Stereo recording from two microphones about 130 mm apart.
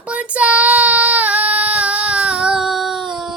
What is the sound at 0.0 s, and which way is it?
Child singing, 10° right (ahead or behind).